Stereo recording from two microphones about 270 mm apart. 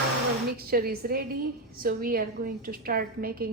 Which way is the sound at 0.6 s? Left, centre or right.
Right.